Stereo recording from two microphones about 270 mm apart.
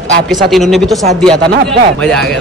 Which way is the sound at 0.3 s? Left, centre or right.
Centre.